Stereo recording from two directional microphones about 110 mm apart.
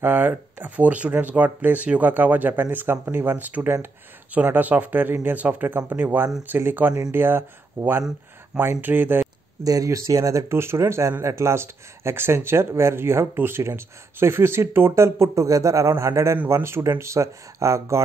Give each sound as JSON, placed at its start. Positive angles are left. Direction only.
{"t": 0.0, "sound": "speech", "side_deg": -15}
{"t": 9.7, "sound": "speech", "side_deg": -30}